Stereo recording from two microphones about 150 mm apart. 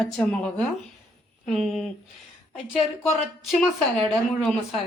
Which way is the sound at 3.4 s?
Centre (ahead or behind).